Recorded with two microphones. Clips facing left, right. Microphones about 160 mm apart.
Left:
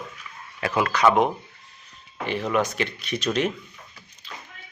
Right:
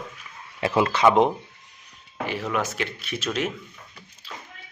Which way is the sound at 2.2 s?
5° right (ahead or behind).